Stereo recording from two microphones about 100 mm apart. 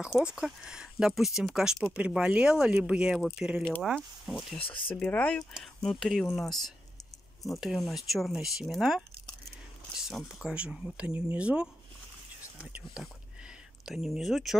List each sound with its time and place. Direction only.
0.2 s speech: 10° right (ahead or behind)
4.6 s speech: 60° left (ahead or behind)
4.9 s speech: 10° left (ahead or behind)